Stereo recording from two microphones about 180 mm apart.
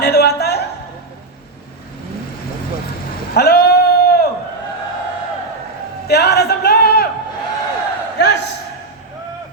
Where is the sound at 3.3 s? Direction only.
60° left (ahead or behind).